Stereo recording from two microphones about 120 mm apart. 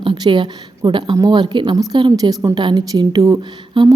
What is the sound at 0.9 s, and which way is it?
A woman's voice, 40° right (ahead or behind).